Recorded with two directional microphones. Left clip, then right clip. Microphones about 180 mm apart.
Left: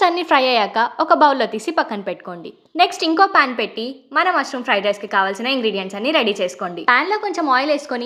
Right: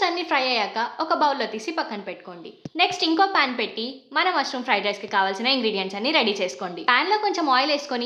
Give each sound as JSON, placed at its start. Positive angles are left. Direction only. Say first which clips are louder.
{"t": 0.0, "sound": "a woman's voice", "louder": "left 7 dB", "side_deg": 35}